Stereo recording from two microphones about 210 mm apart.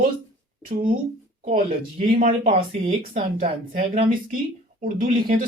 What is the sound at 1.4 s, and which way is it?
Speech, 30° right (ahead or behind).